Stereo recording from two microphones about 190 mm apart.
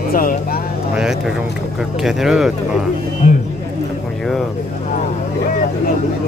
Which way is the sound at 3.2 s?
40° left (ahead or behind).